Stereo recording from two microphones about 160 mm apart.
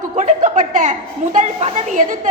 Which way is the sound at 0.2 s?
50° right (ahead or behind).